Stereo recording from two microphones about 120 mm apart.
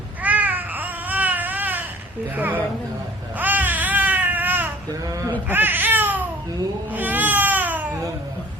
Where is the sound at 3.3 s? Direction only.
15° right (ahead or behind).